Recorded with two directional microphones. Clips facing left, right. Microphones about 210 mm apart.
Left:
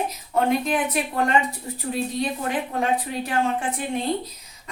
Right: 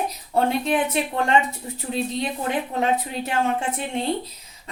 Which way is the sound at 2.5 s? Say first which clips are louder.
Right 4 dB; 25° right (ahead or behind).